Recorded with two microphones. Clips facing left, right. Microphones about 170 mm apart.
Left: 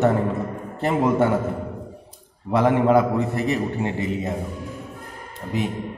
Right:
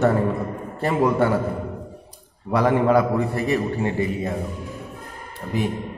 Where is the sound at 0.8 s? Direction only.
20° left (ahead or behind).